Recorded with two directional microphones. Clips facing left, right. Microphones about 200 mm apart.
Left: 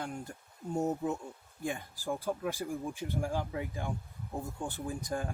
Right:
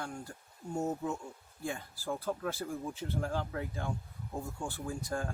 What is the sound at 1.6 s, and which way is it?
Speech, 15° left (ahead or behind).